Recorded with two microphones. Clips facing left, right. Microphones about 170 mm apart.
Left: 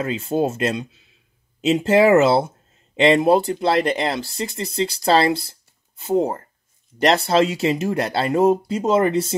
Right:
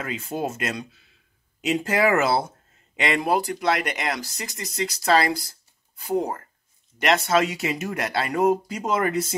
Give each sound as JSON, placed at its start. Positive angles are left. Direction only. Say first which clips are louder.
{"t": 0.0, "sound": "speech", "louder": "left 7 dB", "side_deg": 30}